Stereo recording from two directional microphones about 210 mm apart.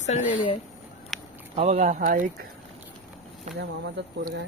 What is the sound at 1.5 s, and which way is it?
Speech, 30° right (ahead or behind).